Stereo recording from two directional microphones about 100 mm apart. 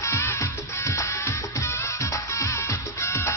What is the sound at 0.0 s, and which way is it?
Music, 30° left (ahead or behind).